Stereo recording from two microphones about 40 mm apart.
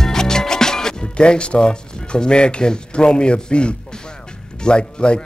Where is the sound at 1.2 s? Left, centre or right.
Left.